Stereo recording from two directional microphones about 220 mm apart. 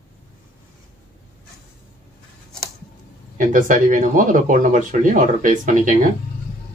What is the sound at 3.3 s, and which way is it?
Speech, 35° right (ahead or behind).